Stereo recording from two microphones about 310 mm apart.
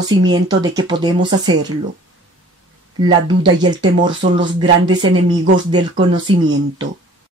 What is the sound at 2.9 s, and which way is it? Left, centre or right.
Speech, centre.